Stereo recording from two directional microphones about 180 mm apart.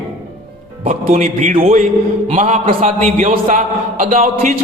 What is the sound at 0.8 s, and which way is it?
A man's voice, 40° right (ahead or behind).